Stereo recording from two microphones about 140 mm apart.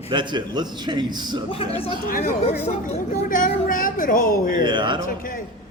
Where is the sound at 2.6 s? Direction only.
50° left (ahead or behind).